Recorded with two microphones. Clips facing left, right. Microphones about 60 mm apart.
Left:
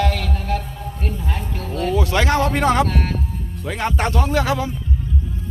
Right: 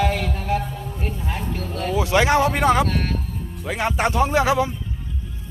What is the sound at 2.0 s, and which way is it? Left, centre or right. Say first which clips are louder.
Music: right 3 dB; centre.